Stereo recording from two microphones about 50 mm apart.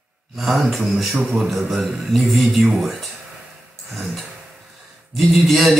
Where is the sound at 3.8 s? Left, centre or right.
Centre.